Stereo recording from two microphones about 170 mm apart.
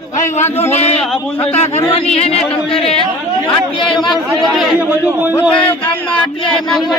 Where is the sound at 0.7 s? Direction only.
40° left (ahead or behind).